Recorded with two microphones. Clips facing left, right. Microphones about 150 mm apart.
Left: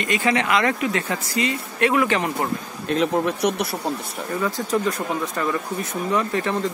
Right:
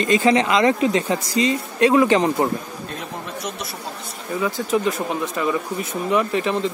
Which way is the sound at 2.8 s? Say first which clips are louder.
Left 11 dB; 85° left.